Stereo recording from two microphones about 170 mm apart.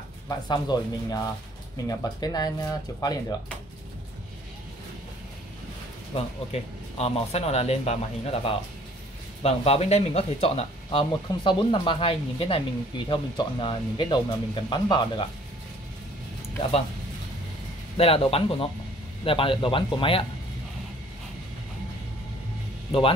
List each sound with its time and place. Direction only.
0.5 s speech: 25° left (ahead or behind)
6.1 s speech: 35° left (ahead or behind)
17.9 s speech: 35° left (ahead or behind)
22.8 s speech: 30° left (ahead or behind)